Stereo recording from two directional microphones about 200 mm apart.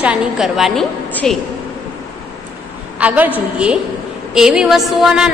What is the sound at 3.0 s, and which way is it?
A woman's voice, 10° right (ahead or behind).